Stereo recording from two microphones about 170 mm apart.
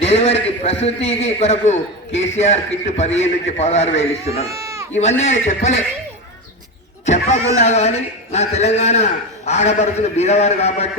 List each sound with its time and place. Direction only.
0.0 s a man's voice: 35° left (ahead or behind)
4.4 s a sound: 20° right (ahead or behind)
4.9 s a man's voice: 40° left (ahead or behind)
7.0 s a man's voice: 40° left (ahead or behind)